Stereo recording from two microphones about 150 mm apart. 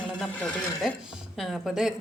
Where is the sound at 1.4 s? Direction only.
Centre (ahead or behind).